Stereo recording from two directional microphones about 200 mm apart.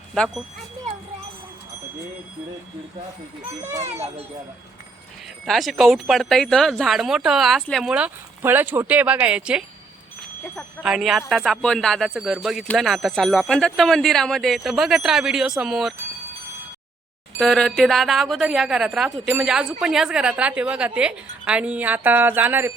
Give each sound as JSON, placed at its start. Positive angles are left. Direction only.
{"t": 0.1, "sound": "speech", "side_deg": 0}
{"t": 3.6, "sound": "a woman's voice", "side_deg": -15}
{"t": 3.8, "sound": "a child's voice", "side_deg": -30}
{"t": 5.5, "sound": "speech", "side_deg": 0}
{"t": 10.8, "sound": "speech", "side_deg": 0}
{"t": 17.3, "sound": "a woman's voice", "side_deg": 0}